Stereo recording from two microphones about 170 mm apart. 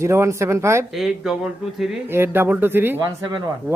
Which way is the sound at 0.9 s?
Centre (ahead or behind).